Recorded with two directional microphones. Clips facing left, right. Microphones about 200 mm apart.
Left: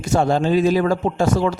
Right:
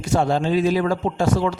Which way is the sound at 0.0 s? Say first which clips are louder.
Left 2 dB; 45° left (ahead or behind).